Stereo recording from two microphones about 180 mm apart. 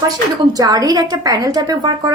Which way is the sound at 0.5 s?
20° right (ahead or behind).